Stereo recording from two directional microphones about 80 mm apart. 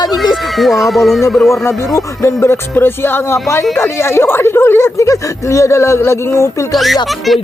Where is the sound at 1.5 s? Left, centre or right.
Left.